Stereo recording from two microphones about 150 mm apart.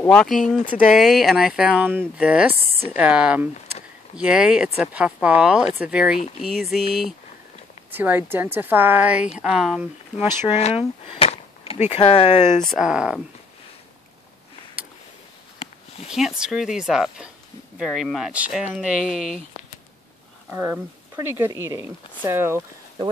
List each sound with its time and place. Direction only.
0.0 s a woman's voice: 5° left (ahead or behind)
7.9 s a woman's voice: 10° right (ahead or behind)
10.5 s speech: 40° left (ahead or behind)
12.6 s speech: 5° right (ahead or behind)
16.1 s speech: 5° right (ahead or behind)
20.4 s a woman's voice: 10° right (ahead or behind)